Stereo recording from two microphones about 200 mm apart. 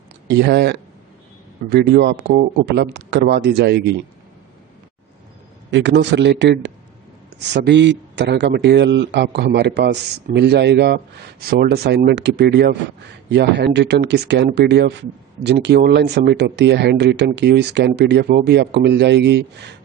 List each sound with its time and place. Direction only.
0.3 s a man's voice: 55° right (ahead or behind)
5.7 s speech: 60° right (ahead or behind)